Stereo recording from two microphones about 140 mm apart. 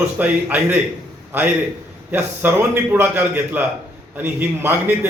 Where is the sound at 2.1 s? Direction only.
15° right (ahead or behind).